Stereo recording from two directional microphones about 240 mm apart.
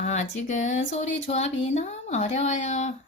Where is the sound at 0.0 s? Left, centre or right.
Left.